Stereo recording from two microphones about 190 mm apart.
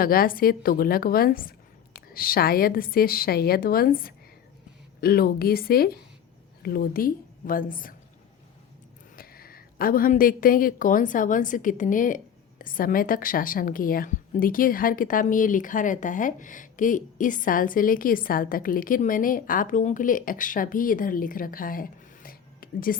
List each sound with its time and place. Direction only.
0.0 s a woman's voice: 50° left (ahead or behind)
9.1 s a woman's voice: 50° left (ahead or behind)